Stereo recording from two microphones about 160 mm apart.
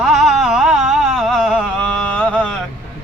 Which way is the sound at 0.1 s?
Centre (ahead or behind).